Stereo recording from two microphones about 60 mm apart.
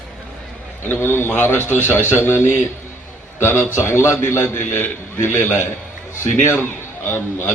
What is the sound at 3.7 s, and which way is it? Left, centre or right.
A man's voice, left.